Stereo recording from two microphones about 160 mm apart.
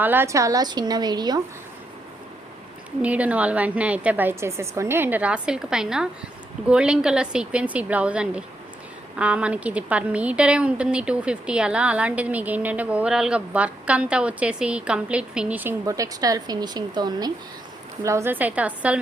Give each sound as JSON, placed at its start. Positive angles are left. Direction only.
{"t": 0.0, "sound": "a woman's voice", "side_deg": -10}
{"t": 3.0, "sound": "a woman's voice", "side_deg": -10}
{"t": 15.9, "sound": "a woman's voice", "side_deg": -20}